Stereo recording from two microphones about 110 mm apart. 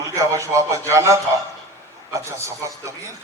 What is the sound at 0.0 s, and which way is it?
Speech, 25° right (ahead or behind).